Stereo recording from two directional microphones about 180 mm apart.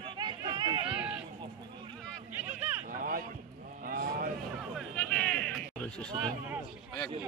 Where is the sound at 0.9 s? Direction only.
5° right (ahead or behind).